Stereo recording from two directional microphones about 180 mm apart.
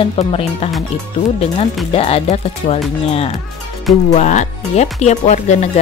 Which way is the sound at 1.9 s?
35° left (ahead or behind).